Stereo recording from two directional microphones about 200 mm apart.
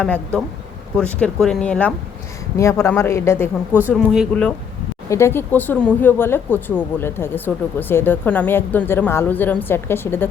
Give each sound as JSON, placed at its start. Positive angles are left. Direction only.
{"t": 0.0, "sound": "speech", "side_deg": 5}
{"t": 3.8, "sound": "speech", "side_deg": -5}
{"t": 5.0, "sound": "speech", "side_deg": 15}